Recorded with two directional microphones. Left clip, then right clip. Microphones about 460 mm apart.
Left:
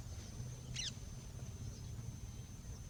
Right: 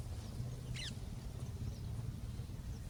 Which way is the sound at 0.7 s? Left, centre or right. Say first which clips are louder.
Left 3 dB; left.